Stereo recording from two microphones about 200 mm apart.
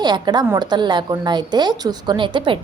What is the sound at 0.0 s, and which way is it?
A woman's voice, 20° right (ahead or behind).